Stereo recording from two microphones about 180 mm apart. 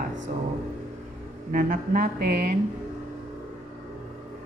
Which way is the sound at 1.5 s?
50° right (ahead or behind).